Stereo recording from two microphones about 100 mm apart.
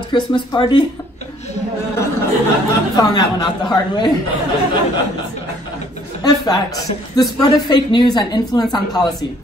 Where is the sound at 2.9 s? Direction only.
40° left (ahead or behind).